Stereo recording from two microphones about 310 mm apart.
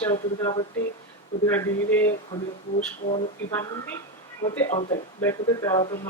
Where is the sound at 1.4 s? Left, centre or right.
Centre.